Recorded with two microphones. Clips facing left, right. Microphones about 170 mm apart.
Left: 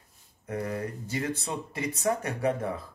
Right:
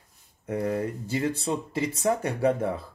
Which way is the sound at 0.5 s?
30° right (ahead or behind).